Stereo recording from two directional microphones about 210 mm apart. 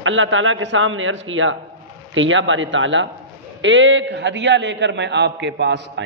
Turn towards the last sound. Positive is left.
turn(degrees=-55)  # may be behind; listen again after turning